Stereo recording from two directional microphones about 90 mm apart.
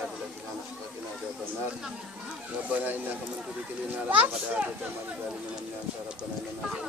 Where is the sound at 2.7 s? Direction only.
20° right (ahead or behind).